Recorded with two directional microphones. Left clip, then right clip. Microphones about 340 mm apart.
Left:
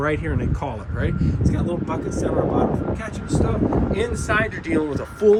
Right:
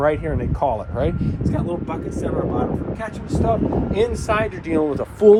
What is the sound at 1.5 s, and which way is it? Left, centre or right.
Speech, centre.